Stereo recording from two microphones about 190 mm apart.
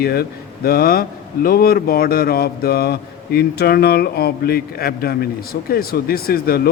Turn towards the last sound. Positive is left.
turn(degrees=50)  # may be behind; listen again after turning